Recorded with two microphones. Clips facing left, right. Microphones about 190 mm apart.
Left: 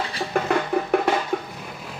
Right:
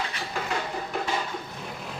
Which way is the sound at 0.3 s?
60° left (ahead or behind).